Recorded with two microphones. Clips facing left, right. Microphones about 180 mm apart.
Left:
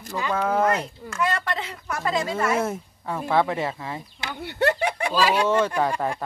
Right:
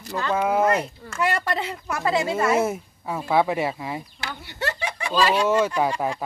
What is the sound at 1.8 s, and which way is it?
Speech, 25° right (ahead or behind).